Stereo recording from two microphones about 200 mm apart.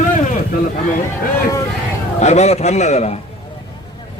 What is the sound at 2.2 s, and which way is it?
Speech, 35° left (ahead or behind).